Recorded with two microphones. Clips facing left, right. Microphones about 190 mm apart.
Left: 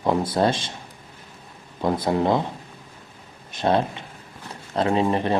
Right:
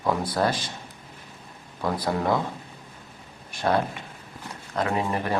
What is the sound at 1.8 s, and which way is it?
Speech, 25° left (ahead or behind).